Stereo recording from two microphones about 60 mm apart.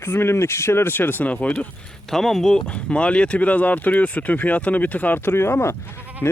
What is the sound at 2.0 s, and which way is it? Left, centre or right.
Speech, centre.